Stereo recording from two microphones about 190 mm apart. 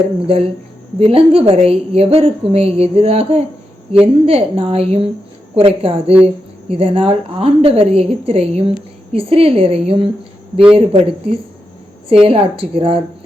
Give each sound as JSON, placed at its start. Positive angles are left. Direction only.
{"t": 0.9, "sound": "a woman's voice", "side_deg": -30}